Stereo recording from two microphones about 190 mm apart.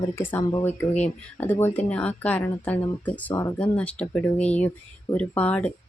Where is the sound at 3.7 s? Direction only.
5° left (ahead or behind).